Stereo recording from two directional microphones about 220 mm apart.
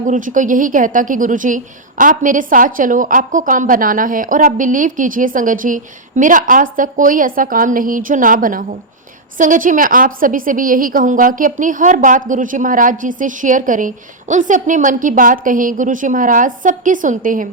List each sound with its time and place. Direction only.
0.0 s a woman's voice: 35° right (ahead or behind)